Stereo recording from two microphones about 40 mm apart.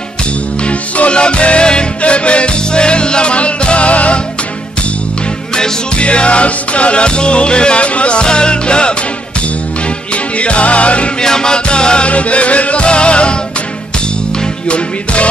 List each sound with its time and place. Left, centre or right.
0.7 s music: left
5.9 s music: left
10.1 s music: left
11.1 s music: centre